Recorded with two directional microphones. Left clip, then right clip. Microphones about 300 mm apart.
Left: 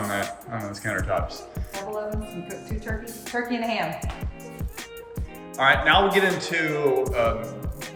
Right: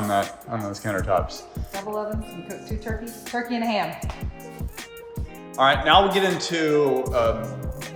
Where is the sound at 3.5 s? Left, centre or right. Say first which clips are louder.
Right 3 dB; right.